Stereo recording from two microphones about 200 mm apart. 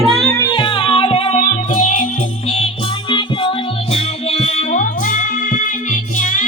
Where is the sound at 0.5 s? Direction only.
25° left (ahead or behind).